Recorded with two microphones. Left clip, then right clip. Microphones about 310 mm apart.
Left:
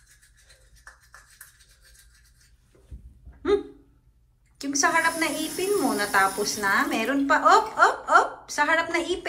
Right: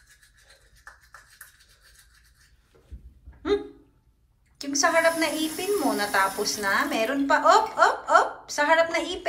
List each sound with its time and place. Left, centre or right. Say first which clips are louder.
4.6 s a woman's voice: even; centre